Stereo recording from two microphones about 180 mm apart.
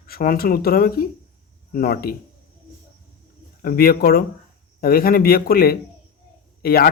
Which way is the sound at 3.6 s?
55° left (ahead or behind).